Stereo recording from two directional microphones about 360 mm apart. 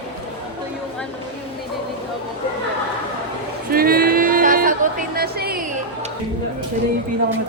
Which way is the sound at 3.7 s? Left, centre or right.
Right.